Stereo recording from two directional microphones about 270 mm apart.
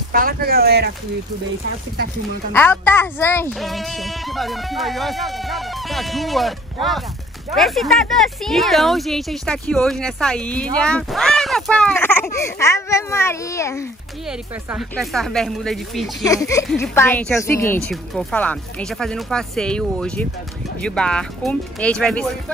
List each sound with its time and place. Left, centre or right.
0.1 s speech: right
2.5 s speech: centre
14.7 s speech: centre
16.3 s speech: centre